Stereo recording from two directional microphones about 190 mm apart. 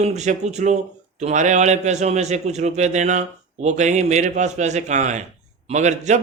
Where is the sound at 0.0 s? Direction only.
35° right (ahead or behind).